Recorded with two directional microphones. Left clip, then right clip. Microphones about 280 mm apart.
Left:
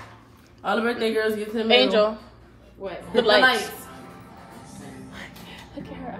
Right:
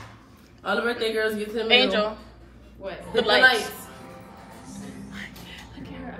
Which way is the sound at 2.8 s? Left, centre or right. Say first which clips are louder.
Left 1 dB; left.